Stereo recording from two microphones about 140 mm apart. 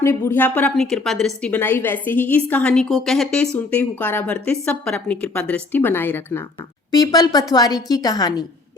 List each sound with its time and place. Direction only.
0.0 s a woman's voice: 15° left (ahead or behind)
0.8 s a woman's voice: 5° left (ahead or behind)
6.9 s a woman's voice: 25° left (ahead or behind)